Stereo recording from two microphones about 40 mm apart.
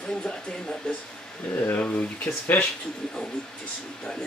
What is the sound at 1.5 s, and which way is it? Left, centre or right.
Speech, left.